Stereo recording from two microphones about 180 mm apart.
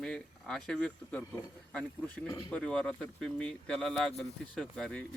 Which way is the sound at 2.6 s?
5° left (ahead or behind).